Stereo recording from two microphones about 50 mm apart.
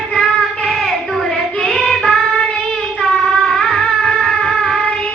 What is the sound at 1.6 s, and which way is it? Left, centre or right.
Child singing, centre.